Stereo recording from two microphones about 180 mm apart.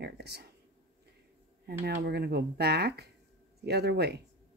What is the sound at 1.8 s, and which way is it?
Speech, 65° right (ahead or behind).